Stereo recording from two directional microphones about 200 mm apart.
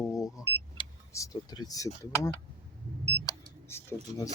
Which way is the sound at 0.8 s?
15° left (ahead or behind).